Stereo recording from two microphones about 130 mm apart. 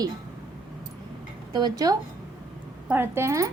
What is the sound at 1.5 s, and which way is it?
Speech, 35° right (ahead or behind).